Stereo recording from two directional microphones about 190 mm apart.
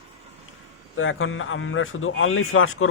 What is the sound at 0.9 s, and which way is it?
A man's voice, 90° left.